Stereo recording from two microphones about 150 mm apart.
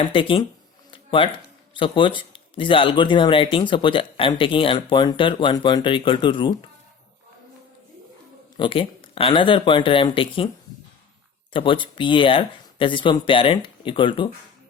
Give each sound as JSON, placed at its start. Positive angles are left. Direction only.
{"t": 0.0, "sound": "speech", "side_deg": 35}
{"t": 0.9, "sound": "a sound", "side_deg": 35}
{"t": 1.7, "sound": "speech", "side_deg": 35}
{"t": 8.5, "sound": "speech", "side_deg": 35}
{"t": 11.5, "sound": "speech", "side_deg": 35}